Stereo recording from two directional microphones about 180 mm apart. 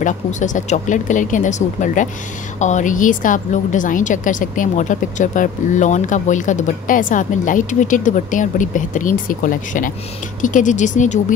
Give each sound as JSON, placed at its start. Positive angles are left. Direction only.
{"t": 0.0, "sound": "a woman's voice", "side_deg": 45}